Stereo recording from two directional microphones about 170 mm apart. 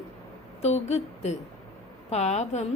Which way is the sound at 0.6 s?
40° left (ahead or behind).